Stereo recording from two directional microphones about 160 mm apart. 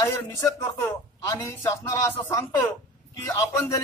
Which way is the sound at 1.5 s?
15° left (ahead or behind).